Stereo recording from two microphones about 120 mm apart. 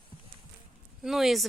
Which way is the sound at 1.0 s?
Centre (ahead or behind).